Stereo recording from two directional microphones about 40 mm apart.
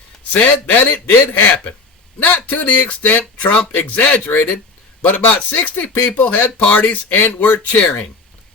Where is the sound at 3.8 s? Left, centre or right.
Left.